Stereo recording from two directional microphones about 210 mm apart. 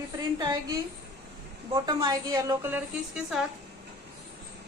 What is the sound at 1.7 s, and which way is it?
A woman's voice, 20° right (ahead or behind).